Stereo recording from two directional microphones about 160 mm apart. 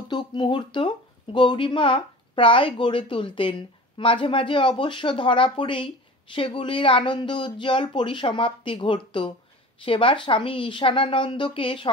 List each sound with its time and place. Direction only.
0.1 s speech: 30° left (ahead or behind)